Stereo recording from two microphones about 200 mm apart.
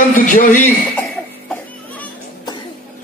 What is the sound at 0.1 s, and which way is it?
Speech, 40° left (ahead or behind).